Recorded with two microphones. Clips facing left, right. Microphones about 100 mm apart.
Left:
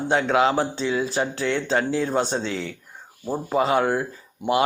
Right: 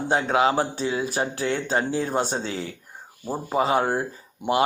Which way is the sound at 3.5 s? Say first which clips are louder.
Left 1 dB; 25° right (ahead or behind).